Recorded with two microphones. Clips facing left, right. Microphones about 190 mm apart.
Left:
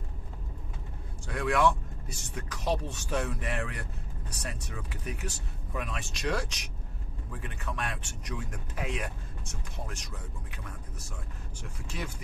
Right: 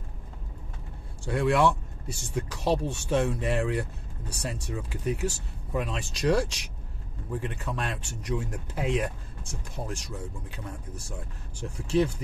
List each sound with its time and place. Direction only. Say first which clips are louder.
1.2 s speech: right 3 dB; 30° right (ahead or behind)
11.6 s speech: right 14 dB; 30° right (ahead or behind)